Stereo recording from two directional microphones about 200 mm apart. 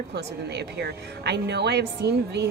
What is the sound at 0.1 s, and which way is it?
A woman's voice, 55° right (ahead or behind).